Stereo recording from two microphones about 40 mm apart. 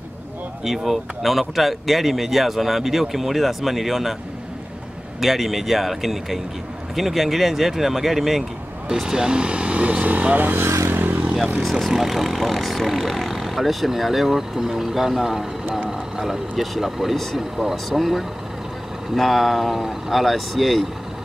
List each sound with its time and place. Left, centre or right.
0.7 s speech: centre
5.2 s speech: centre
8.9 s speech: centre; by 11.1 s right
11.9 s speech: centre